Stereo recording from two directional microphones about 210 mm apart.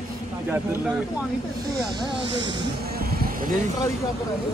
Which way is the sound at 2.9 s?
45° right (ahead or behind).